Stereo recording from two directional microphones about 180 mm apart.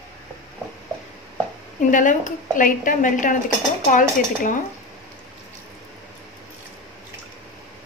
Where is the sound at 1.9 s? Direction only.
45° left (ahead or behind).